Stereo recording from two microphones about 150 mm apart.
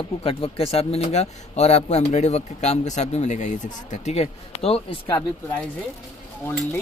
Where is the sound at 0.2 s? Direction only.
40° left (ahead or behind).